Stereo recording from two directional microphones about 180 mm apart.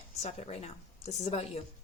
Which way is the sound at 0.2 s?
35° left (ahead or behind).